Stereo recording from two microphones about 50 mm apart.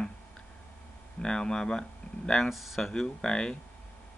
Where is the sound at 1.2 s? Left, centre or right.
Centre.